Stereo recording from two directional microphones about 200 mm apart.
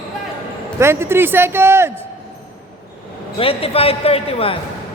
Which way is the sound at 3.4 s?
30° left (ahead or behind).